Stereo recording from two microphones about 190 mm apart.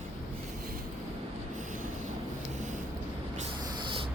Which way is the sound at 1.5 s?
45° right (ahead or behind).